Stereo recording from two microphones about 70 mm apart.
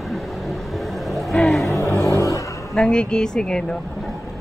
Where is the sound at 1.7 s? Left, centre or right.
Left.